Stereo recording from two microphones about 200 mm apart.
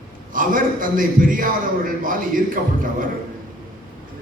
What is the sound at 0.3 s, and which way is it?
A man's voice, 45° right (ahead or behind).